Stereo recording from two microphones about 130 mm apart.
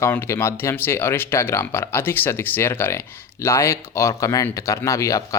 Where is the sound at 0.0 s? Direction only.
20° left (ahead or behind).